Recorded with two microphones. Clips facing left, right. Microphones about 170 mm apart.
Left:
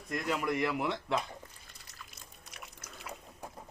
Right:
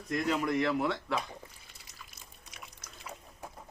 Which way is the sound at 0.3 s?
10° left (ahead or behind).